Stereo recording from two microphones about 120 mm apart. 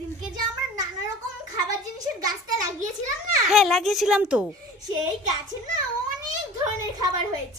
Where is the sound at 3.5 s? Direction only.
Centre (ahead or behind).